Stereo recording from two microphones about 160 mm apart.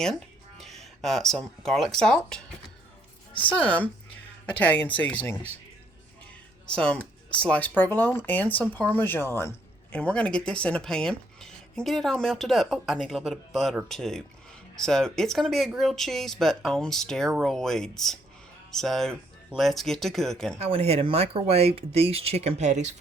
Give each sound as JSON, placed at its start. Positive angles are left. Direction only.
{"t": 0.0, "sound": "speech", "side_deg": 0}
{"t": 3.5, "sound": "speech", "side_deg": 10}
{"t": 6.7, "sound": "a man's voice", "side_deg": 5}
{"t": 20.6, "sound": "speech", "side_deg": -40}